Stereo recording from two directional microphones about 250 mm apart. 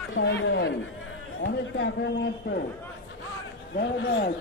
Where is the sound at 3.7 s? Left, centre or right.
Left.